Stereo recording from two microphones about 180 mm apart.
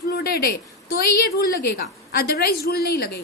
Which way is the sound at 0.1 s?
60° left (ahead or behind).